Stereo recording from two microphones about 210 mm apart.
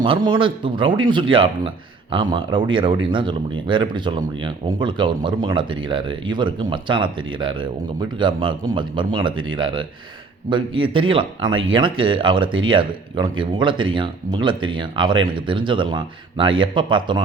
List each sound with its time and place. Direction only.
0.0 s speech: 25° right (ahead or behind)